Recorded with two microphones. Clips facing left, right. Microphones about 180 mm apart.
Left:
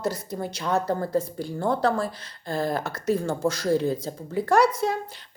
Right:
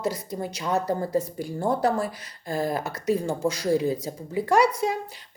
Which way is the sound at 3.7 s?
Centre (ahead or behind).